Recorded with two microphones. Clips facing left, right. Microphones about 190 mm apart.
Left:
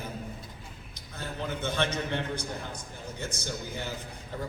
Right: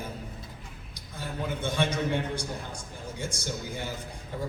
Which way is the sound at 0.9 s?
10° right (ahead or behind).